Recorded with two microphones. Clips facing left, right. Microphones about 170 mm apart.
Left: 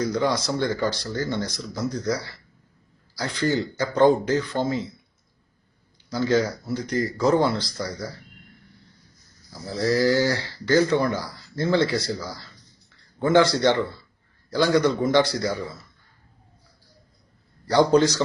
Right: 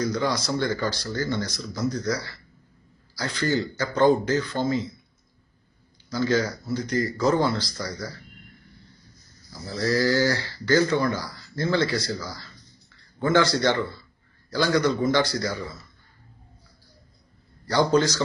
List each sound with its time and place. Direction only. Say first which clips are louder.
0.0 s speech: left 2 dB; 25° left (ahead or behind)
6.1 s speech: left 2 dB; 25° left (ahead or behind)
9.5 s speech: left 2 dB; 25° left (ahead or behind)
17.7 s speech: left 3 dB; 25° left (ahead or behind)